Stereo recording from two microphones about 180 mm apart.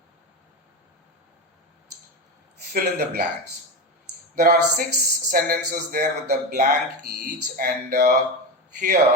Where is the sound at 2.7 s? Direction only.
55° right (ahead or behind).